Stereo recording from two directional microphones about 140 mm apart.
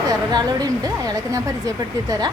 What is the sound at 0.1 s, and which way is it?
Speech, 25° right (ahead or behind).